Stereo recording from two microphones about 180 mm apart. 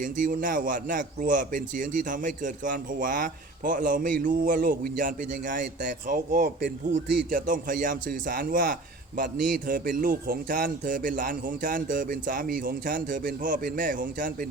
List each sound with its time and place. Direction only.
0.0 s speech: 45° right (ahead or behind)